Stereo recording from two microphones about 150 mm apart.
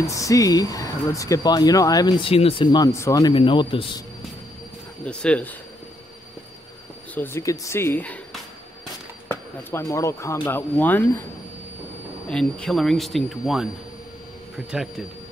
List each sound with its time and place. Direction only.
0.0 s speech: 20° left (ahead or behind)
5.0 s speech: 10° left (ahead or behind)
7.2 s speech: 15° left (ahead or behind)
12.3 s speech: 5° left (ahead or behind)